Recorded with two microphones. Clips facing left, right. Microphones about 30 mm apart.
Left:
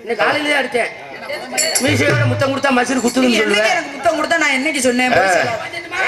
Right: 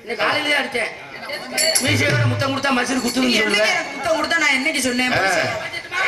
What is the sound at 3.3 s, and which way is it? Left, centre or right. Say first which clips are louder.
A woman's voice: left 3 dB; centre.